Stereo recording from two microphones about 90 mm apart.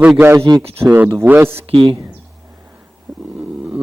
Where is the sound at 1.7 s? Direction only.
70° right (ahead or behind).